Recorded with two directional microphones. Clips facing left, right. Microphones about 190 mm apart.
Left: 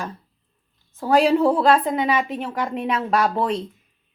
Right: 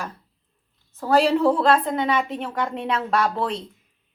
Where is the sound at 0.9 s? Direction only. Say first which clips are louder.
Left 2 dB; 15° left (ahead or behind).